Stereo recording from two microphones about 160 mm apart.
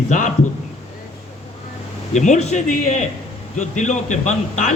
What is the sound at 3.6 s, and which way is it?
A man's voice, 50° left (ahead or behind).